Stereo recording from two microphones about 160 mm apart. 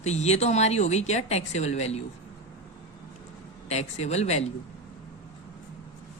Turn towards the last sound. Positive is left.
turn(degrees=40)  # may be behind; listen again after turning